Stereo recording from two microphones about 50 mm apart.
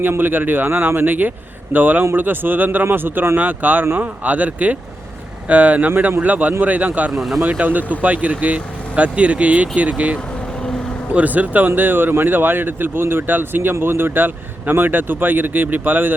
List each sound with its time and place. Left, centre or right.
0.0 s a man's voice: right
3.3 s a man's voice: right
7.1 s speech: centre
7.6 s a man's voice: right
11.1 s a man's voice: right